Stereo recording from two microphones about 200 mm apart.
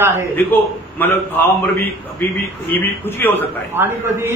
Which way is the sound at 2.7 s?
10° left (ahead or behind).